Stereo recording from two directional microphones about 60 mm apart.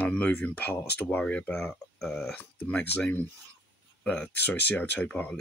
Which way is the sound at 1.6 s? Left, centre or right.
Centre.